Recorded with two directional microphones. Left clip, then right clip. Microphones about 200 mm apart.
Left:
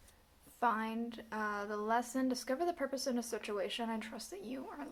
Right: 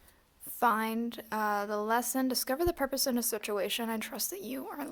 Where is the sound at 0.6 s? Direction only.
55° right (ahead or behind).